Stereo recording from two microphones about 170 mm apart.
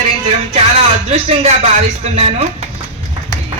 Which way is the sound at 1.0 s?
40° right (ahead or behind).